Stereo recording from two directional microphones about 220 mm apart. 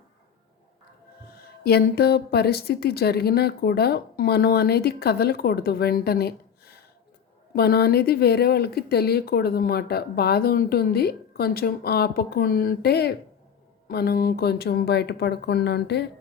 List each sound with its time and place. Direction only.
1.6 s speech: 45° left (ahead or behind)